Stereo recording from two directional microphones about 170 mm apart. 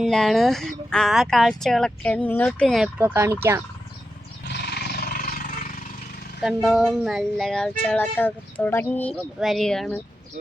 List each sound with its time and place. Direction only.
0.0 s speech: centre (ahead or behind)
3.0 s speech: 15° right (ahead or behind)
4.4 s roar: 75° left (ahead or behind); by 5.4 s 60° left (ahead or behind)
6.4 s speech: centre (ahead or behind)
9.1 s speech: centre (ahead or behind)